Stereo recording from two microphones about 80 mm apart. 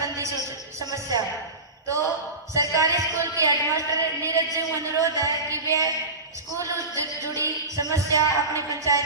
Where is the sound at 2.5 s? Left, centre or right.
Right.